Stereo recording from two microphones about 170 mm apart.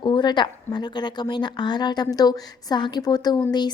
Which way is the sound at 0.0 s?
25° left (ahead or behind).